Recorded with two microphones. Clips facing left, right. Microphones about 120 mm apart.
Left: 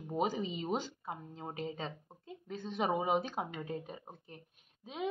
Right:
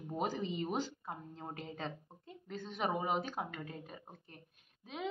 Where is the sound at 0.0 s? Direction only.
15° left (ahead or behind).